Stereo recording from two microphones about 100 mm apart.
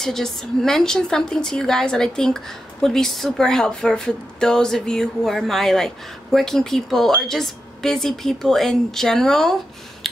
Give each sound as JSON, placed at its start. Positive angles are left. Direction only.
{"t": 0.0, "sound": "a woman's voice", "side_deg": 5}